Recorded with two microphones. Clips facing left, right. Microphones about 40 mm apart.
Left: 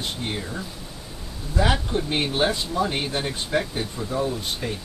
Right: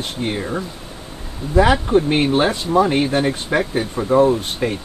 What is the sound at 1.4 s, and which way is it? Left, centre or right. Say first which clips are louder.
Speech: right 9 dB; right.